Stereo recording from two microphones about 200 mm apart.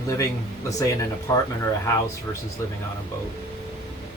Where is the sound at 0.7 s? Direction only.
15° left (ahead or behind).